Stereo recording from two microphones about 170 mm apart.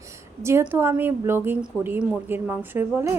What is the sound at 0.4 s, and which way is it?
A woman's voice, 15° right (ahead or behind).